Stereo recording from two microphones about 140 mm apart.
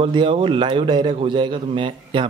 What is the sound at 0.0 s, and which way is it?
A man's voice, 35° right (ahead or behind).